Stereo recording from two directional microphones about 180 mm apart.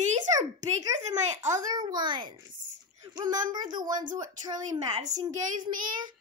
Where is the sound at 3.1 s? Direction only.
20° right (ahead or behind).